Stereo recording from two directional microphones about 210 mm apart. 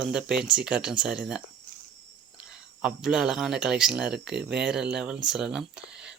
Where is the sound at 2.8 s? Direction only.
5° right (ahead or behind).